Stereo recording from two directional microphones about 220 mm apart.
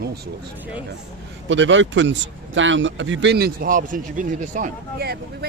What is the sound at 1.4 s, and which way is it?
Speech, 55° right (ahead or behind).